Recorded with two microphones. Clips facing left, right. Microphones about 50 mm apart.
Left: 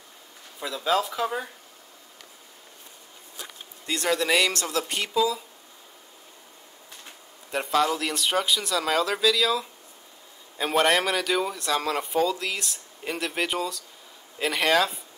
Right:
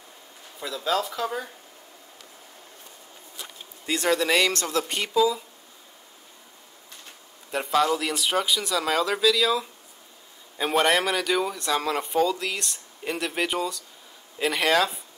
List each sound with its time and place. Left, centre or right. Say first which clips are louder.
0.6 s speech: left 1 dB; centre
3.8 s speech: right 2 dB; centre
7.5 s speech: right 1 dB; centre